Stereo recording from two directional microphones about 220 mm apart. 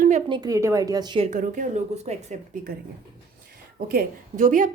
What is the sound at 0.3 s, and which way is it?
A woman's voice, 20° right (ahead or behind).